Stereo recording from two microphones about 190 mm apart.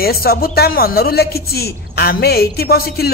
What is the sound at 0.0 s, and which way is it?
Speech, 55° left (ahead or behind).